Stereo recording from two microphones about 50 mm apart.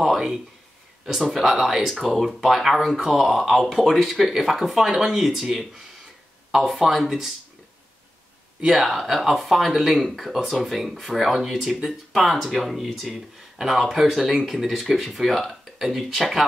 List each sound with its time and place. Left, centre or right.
0.0 s a sound: centre
1.0 s speech: centre
8.6 s speech: centre